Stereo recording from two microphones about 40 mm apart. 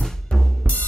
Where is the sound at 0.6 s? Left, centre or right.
Left.